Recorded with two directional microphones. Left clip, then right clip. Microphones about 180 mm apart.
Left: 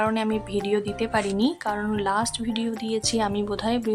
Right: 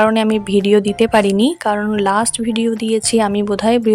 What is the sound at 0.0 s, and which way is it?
A woman's voice, 40° right (ahead or behind).